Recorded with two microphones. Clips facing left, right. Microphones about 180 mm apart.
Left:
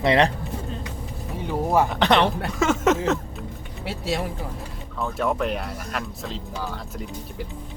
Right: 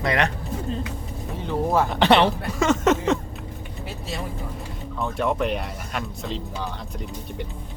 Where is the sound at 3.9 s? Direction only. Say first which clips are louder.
Left 7 dB; 90° left.